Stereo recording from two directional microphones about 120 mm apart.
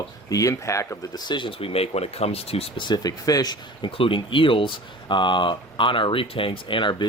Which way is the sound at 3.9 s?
50° left (ahead or behind).